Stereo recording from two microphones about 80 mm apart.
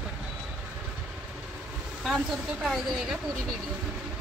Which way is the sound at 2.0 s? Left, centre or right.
Centre.